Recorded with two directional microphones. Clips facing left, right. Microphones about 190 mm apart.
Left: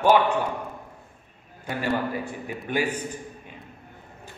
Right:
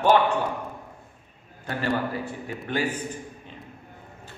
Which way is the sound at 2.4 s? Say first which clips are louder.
Left 1 dB; 10° left (ahead or behind).